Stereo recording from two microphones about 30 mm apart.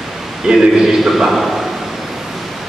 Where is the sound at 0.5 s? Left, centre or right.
Right.